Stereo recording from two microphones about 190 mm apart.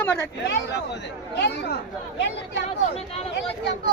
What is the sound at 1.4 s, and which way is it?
Speech, 60° left (ahead or behind).